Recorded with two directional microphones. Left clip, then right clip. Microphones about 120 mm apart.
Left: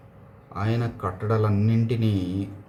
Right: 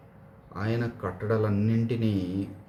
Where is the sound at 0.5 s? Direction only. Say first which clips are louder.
Left 2 dB; 15° left (ahead or behind).